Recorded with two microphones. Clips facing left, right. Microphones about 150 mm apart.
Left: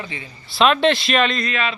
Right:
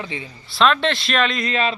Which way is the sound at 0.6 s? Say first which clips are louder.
Left 2 dB; 10° left (ahead or behind).